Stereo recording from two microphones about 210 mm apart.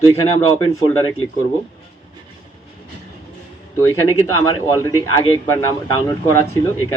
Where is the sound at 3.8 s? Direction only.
15° left (ahead or behind).